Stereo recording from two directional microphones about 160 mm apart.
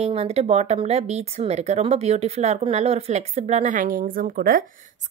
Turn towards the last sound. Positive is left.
turn(degrees=-60)  # may be behind; listen again after turning